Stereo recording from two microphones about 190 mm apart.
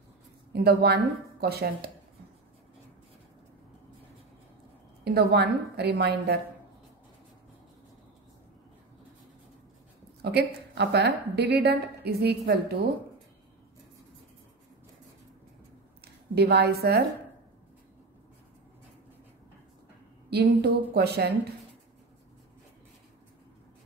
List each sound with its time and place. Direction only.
0.5 s a woman's voice: 55° right (ahead or behind)
5.0 s a woman's voice: 60° right (ahead or behind)
10.2 s a woman's voice: 60° right (ahead or behind)
16.0 s a woman's voice: 55° right (ahead or behind)
20.2 s a woman's voice: 60° right (ahead or behind)